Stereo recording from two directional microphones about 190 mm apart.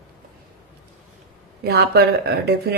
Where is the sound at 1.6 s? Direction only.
55° right (ahead or behind).